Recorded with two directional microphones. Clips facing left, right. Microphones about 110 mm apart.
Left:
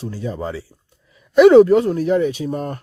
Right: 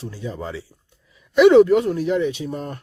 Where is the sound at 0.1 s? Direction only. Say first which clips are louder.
Left 5 dB; 40° left (ahead or behind).